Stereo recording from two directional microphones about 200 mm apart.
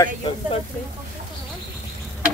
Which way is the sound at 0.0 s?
25° left (ahead or behind).